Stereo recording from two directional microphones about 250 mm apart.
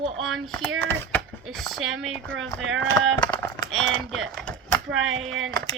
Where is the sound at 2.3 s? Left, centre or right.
Right.